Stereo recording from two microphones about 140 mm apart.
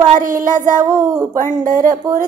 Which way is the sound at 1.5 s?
70° right (ahead or behind).